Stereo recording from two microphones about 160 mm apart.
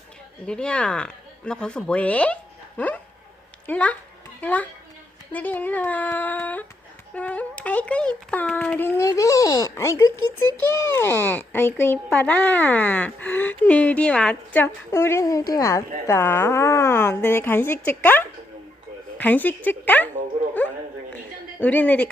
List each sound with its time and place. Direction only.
0.4 s a child's voice: 5° left (ahead or behind)
21.6 s speech: 10° left (ahead or behind)